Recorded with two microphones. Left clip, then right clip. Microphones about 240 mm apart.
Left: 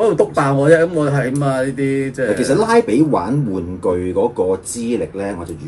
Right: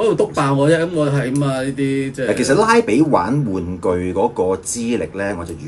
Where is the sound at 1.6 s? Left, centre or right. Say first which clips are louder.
Left 2 dB; centre.